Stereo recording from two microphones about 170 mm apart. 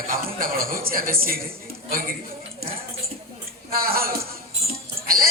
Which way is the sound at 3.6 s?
60° right (ahead or behind).